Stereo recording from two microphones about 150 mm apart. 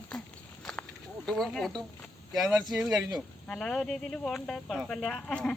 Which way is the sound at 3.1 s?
Centre (ahead or behind).